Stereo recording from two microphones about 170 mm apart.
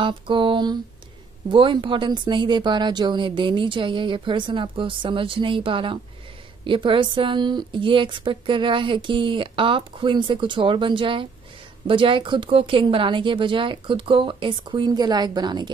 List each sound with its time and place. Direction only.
0.0 s a woman's voice: 30° right (ahead or behind)